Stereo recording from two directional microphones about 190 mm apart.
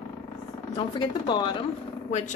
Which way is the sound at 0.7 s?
25° left (ahead or behind).